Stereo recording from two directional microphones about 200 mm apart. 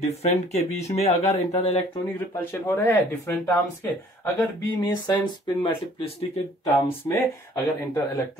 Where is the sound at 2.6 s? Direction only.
10° left (ahead or behind).